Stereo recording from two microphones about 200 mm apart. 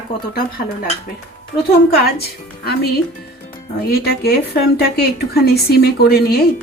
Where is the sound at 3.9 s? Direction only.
50° left (ahead or behind).